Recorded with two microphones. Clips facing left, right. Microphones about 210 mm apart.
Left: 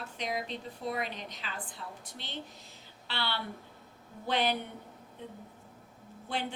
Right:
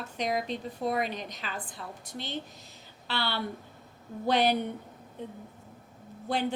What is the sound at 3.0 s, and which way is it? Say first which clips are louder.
A woman's voice: right 4 dB; 45° right (ahead or behind).